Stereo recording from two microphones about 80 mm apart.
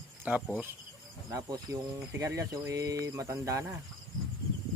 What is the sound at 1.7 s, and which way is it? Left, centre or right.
Speech, right.